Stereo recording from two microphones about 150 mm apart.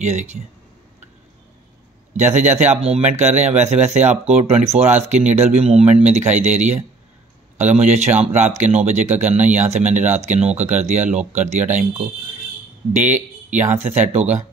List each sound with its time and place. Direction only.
0.0 s speech: 50° right (ahead or behind)
2.1 s speech: 50° right (ahead or behind)